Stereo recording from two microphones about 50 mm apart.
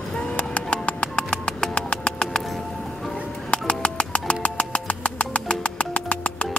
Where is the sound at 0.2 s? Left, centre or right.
Left.